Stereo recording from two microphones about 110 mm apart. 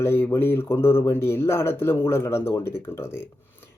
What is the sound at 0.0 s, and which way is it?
Speech, 20° left (ahead or behind).